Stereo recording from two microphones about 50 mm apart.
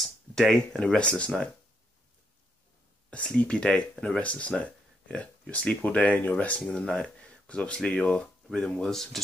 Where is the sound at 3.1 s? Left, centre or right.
Left.